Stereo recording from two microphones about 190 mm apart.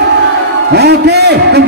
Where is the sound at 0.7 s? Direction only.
60° right (ahead or behind).